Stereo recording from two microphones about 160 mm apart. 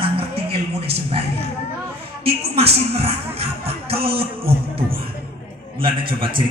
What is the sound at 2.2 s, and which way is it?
Speech, 40° right (ahead or behind).